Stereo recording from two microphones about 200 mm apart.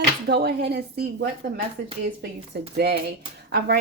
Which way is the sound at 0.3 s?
55° right (ahead or behind).